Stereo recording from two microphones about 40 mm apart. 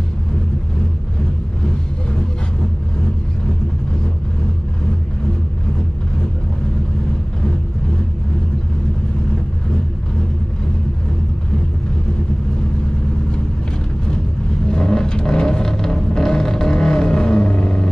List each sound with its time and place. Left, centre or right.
14.7 s vehicle: centre